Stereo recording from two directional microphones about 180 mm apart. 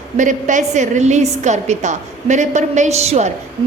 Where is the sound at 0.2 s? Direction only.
45° right (ahead or behind).